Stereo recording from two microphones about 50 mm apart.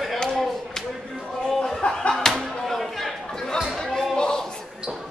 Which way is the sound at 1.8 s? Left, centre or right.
Centre.